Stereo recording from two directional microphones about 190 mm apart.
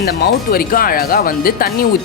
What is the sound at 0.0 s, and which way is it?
Speech, 55° left (ahead or behind).